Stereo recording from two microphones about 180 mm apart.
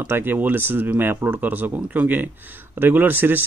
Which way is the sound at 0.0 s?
10° right (ahead or behind).